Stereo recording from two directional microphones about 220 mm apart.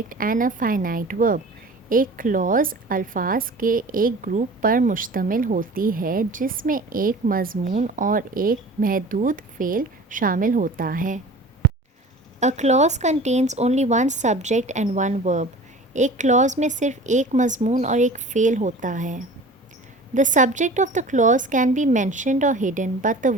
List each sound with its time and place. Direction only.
0.1 s a woman's voice: 40° right (ahead or behind)
12.4 s a woman's voice: 30° right (ahead or behind)